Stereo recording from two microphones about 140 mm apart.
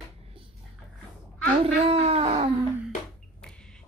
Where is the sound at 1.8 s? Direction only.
45° right (ahead or behind).